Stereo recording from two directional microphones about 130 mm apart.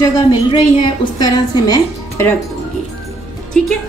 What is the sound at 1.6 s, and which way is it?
Speech, 25° left (ahead or behind).